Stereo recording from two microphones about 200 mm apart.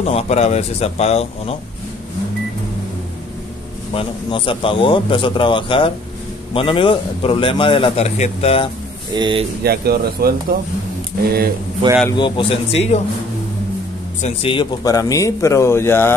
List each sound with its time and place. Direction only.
0.0 s a man's voice: 30° left (ahead or behind)
3.9 s a man's voice: 25° left (ahead or behind)
9.1 s speech: 25° right (ahead or behind)
9.6 s speech: 50° right (ahead or behind)
11.8 s speech: 25° right (ahead or behind)
12.2 s a man's voice: 25° left (ahead or behind)
14.2 s speech: 25° left (ahead or behind); by 16.2 s 10° left (ahead or behind)